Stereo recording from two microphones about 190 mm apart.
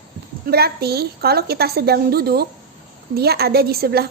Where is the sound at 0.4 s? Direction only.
55° right (ahead or behind).